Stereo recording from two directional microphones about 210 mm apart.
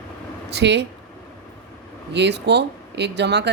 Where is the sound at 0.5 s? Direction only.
55° right (ahead or behind).